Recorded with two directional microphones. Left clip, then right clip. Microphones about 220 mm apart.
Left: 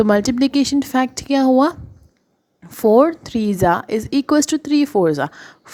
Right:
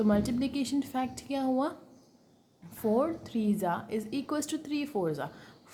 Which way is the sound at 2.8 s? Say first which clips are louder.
Left 16 dB; 40° left (ahead or behind).